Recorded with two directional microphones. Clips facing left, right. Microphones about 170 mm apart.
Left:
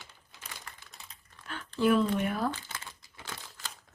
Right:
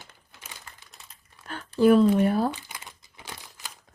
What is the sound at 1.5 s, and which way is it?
Speech, 40° right (ahead or behind).